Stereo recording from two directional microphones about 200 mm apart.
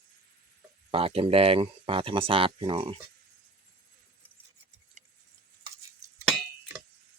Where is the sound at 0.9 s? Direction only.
30° right (ahead or behind).